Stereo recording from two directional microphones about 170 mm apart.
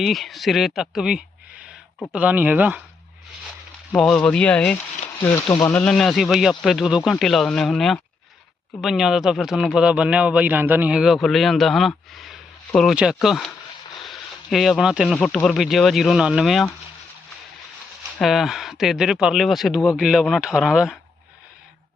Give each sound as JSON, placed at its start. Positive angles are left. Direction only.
{"t": 0.0, "sound": "a man's voice", "side_deg": 0}
{"t": 3.9, "sound": "speech", "side_deg": 5}
{"t": 5.2, "sound": "speech", "side_deg": 20}
{"t": 5.8, "sound": "a man's voice", "side_deg": 5}
{"t": 18.2, "sound": "a man's voice", "side_deg": 0}